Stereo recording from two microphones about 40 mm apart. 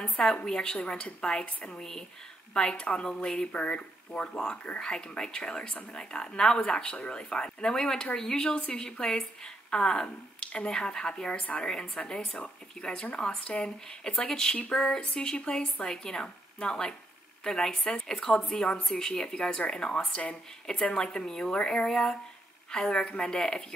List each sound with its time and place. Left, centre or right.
0.5 s speech: centre
1.8 s speech: centre
3.5 s speech: left
4.7 s speech: left
11.3 s a woman's voice: left
11.6 s speech: centre